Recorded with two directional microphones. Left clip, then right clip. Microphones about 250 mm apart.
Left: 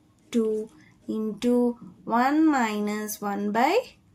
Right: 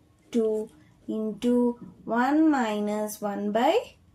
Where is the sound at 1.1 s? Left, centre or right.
Left.